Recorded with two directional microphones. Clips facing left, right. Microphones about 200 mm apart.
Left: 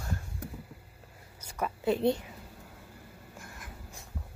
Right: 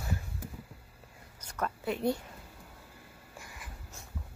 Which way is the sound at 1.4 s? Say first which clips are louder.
Left 1 dB; 10° left (ahead or behind).